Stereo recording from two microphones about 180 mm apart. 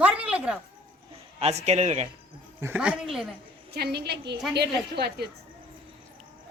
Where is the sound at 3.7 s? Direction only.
65° right (ahead or behind).